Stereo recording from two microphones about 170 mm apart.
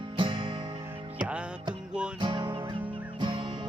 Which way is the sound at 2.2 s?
25° right (ahead or behind).